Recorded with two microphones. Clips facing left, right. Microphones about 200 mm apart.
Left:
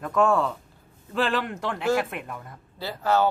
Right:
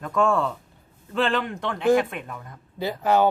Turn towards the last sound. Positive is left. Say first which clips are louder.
# right 3 dB
turn(degrees=-15)  # may be behind; listen again after turning